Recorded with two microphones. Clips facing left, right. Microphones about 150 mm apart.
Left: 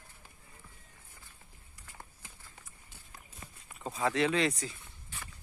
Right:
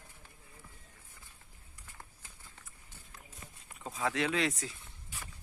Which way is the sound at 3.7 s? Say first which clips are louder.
Left 3 dB; centre (ahead or behind).